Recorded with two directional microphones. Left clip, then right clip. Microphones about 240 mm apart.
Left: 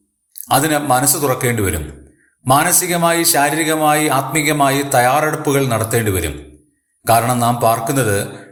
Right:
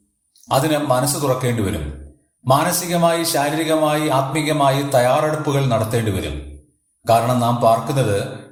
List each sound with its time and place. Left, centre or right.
0.4 s a man's voice: left